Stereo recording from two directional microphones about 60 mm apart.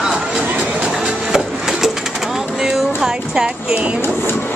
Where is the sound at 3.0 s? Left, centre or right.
Centre.